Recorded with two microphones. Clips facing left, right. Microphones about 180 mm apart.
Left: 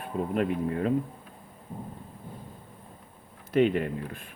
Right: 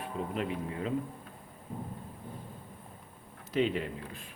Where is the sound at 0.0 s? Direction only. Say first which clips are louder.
Left 6 dB; 55° left (ahead or behind).